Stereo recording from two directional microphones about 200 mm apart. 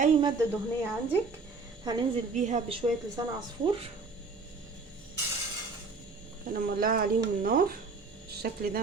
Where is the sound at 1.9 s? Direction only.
20° right (ahead or behind).